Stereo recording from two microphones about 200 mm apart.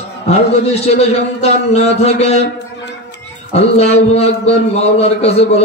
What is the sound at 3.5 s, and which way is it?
A man's voice, 30° left (ahead or behind).